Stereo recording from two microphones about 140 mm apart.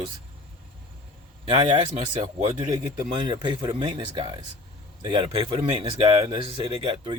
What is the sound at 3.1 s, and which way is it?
Speech, 35° right (ahead or behind).